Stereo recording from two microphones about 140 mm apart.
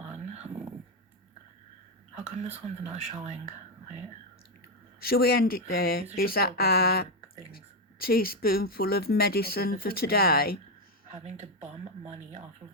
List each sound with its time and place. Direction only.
0.0 s a sound: 50° right (ahead or behind)
2.1 s speech: 50° right (ahead or behind)
4.9 s speech: 90° left
11.1 s speech: 55° right (ahead or behind)